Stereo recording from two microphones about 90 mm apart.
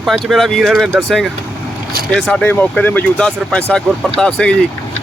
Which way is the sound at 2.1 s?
10° left (ahead or behind).